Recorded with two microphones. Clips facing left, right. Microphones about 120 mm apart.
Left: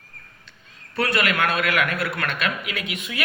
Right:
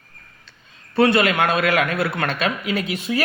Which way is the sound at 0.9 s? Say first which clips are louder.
Right 6 dB; 30° right (ahead or behind).